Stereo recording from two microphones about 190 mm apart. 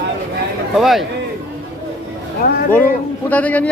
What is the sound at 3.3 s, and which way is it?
Speech, 10° left (ahead or behind).